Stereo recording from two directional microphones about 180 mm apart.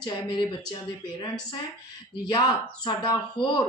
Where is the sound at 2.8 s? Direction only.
25° left (ahead or behind).